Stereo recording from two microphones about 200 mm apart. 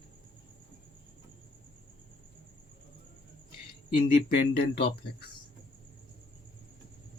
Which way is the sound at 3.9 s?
45° left (ahead or behind).